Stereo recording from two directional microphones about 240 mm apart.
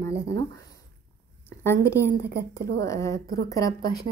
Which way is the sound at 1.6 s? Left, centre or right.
Centre.